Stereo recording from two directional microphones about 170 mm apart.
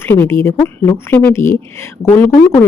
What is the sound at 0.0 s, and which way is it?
Speech, 15° left (ahead or behind).